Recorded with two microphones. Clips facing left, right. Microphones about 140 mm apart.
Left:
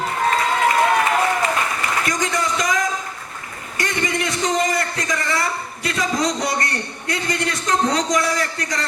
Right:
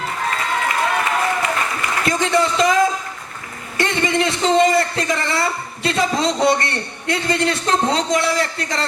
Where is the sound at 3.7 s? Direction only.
30° right (ahead or behind).